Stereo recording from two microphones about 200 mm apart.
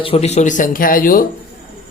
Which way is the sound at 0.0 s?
30° left (ahead or behind).